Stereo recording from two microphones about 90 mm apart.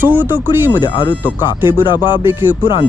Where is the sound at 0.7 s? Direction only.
55° left (ahead or behind).